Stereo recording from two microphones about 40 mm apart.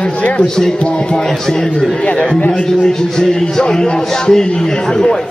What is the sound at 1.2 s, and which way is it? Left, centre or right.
Speech, centre.